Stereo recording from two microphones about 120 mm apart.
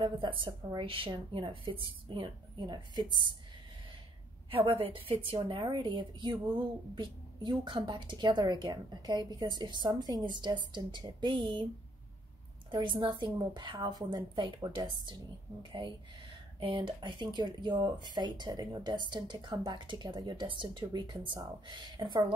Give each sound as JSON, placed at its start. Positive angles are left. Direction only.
{"t": 0.0, "sound": "a woman's voice", "side_deg": -45}
{"t": 4.5, "sound": "a woman's voice", "side_deg": -50}
{"t": 12.7, "sound": "a woman's voice", "side_deg": -40}
{"t": 16.5, "sound": "a woman's voice", "side_deg": -45}